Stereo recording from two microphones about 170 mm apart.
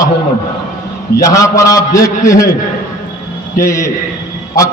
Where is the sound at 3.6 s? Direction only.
15° left (ahead or behind).